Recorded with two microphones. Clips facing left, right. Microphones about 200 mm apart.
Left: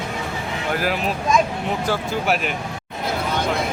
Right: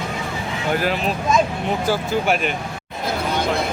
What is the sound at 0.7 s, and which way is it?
Speech, 5° left (ahead or behind).